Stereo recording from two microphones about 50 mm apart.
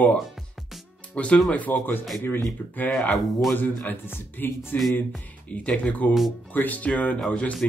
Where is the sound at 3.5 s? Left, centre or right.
Left.